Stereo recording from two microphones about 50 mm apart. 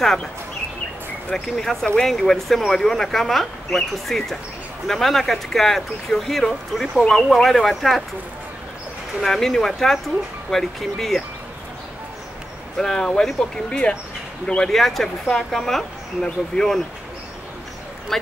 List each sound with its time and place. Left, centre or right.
1.3 s speech: centre
9.2 s speech: centre
12.7 s speech: centre
13.7 s speech: left
14.7 s speech: centre
18.1 s speech: centre